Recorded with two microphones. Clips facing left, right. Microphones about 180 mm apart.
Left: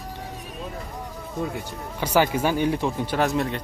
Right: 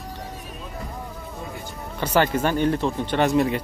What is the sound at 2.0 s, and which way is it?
Speech, 10° left (ahead or behind).